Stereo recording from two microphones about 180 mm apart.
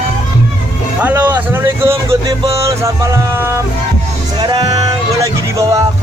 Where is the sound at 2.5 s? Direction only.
15° right (ahead or behind).